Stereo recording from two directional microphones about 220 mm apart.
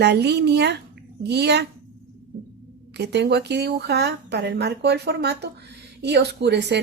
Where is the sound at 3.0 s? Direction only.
50° right (ahead or behind).